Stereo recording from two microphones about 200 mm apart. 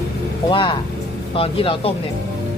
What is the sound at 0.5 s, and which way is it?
Speech, 25° left (ahead or behind).